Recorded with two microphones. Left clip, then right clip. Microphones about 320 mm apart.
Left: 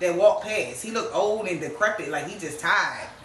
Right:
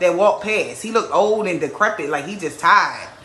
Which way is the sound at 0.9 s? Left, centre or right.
Centre.